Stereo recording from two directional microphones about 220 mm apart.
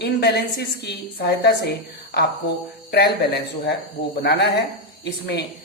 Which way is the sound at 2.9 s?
45° left (ahead or behind).